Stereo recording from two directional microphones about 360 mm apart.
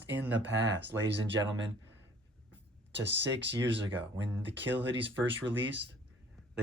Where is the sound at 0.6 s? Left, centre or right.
Right.